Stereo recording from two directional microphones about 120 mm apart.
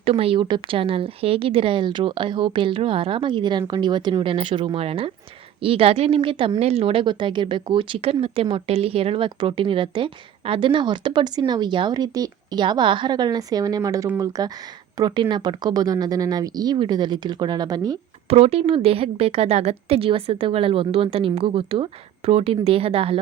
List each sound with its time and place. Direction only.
0.0 s a woman's voice: 50° right (ahead or behind)
7.0 s a woman's voice: 40° right (ahead or behind)
18.3 s a woman's voice: 55° right (ahead or behind)